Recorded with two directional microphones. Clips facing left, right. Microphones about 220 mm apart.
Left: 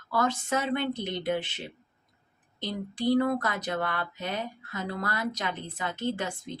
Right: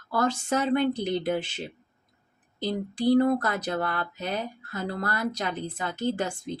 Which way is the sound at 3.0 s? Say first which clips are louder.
Right 4 dB; 45° right (ahead or behind).